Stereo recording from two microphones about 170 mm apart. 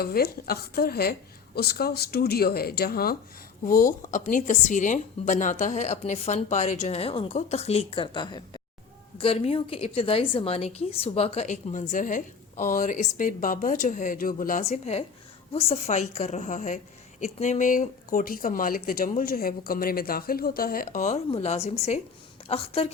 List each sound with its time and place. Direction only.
0.0 s speech: 65° left (ahead or behind)
3.7 s a woman's voice: 50° left (ahead or behind)
14.6 s a woman's voice: 40° left (ahead or behind)
21.2 s a woman's voice: 35° left (ahead or behind)